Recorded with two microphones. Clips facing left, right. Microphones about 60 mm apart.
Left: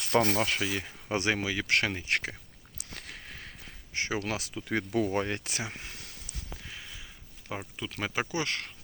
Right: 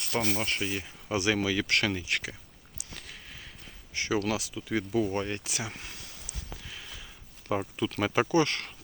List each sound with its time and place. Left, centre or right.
0.1 s speech: left
1.1 s speech: left
1.5 s speech: centre
2.0 s speech: left
2.7 s a sound: left
3.9 s speech: left
4.4 s speech: left
4.9 s speech: left
5.6 s speech: left
6.2 s a sound: left
7.8 s speech: centre